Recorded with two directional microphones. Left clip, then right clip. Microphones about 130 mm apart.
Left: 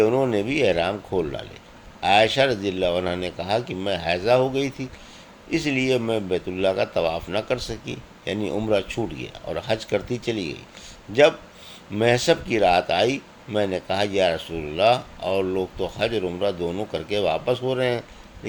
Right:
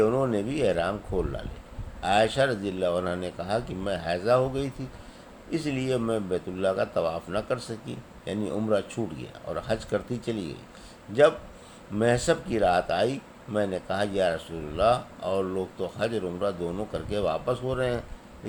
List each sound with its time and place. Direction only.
0.0 s speech: 30° left (ahead or behind)